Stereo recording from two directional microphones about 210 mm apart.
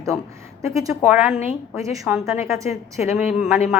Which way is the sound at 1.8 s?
15° right (ahead or behind).